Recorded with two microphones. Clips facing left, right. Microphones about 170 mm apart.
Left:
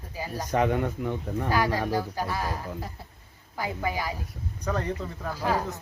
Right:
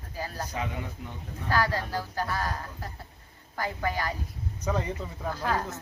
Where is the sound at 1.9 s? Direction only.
10° left (ahead or behind).